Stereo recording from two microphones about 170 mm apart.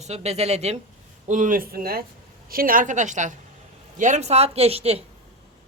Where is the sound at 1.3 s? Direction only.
50° right (ahead or behind).